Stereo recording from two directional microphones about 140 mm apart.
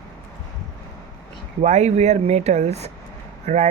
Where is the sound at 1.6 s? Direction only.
55° right (ahead or behind).